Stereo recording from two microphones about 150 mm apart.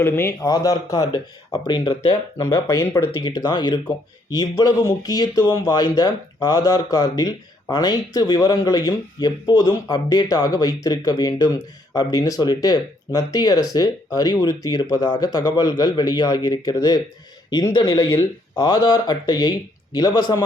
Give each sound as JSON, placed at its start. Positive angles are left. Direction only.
{"t": 0.0, "sound": "speech", "side_deg": 15}
{"t": 2.4, "sound": "speech", "side_deg": 20}
{"t": 3.1, "sound": "speech", "side_deg": 30}